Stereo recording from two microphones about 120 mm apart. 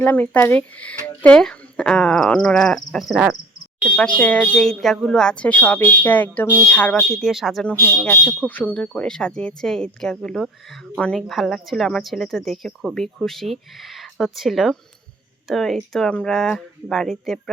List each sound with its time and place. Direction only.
0.0 s speech: 15° left (ahead or behind); by 3.3 s 5° right (ahead or behind)
4.2 s speech: 10° left (ahead or behind)
7.0 s speech: centre (ahead or behind)